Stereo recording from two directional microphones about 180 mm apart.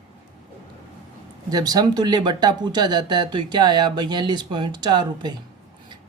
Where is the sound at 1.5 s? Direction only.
20° right (ahead or behind).